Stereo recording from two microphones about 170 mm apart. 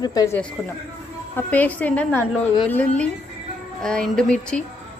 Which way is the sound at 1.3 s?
10° left (ahead or behind).